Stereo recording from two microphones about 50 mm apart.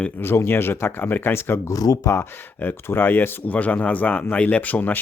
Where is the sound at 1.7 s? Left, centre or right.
Left.